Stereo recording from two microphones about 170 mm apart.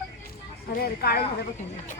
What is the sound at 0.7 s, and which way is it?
Speech, 65° left (ahead or behind).